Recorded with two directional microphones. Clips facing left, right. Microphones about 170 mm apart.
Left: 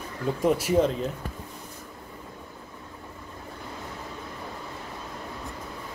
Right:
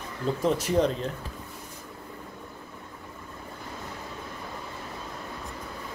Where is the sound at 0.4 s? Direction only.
10° left (ahead or behind).